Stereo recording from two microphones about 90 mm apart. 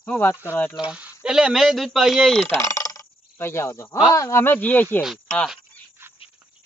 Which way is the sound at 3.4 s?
25° left (ahead or behind).